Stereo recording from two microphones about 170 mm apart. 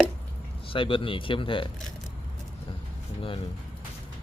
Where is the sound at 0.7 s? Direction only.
30° left (ahead or behind).